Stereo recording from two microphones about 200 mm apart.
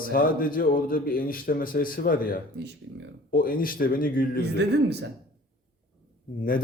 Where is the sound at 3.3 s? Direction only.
45° left (ahead or behind).